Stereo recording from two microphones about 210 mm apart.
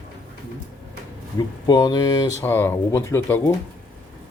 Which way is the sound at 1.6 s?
20° left (ahead or behind).